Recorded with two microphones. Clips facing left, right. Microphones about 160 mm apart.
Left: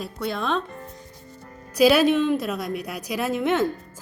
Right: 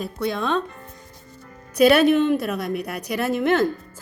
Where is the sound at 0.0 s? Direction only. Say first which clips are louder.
Right 3 dB; centre (ahead or behind).